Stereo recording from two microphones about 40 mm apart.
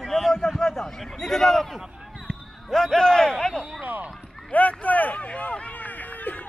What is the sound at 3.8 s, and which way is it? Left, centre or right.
Speech, right.